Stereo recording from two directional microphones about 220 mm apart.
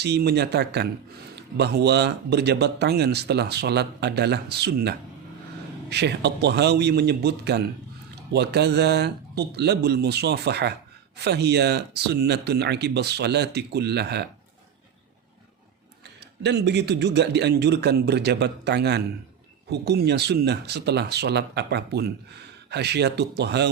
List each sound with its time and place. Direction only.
0.0 s speech: 50° right (ahead or behind)
16.4 s speech: 50° right (ahead or behind)